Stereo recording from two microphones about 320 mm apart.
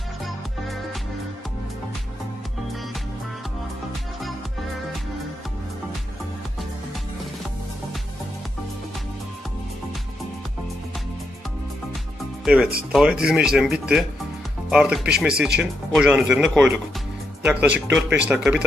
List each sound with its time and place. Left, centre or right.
12.5 s speech: centre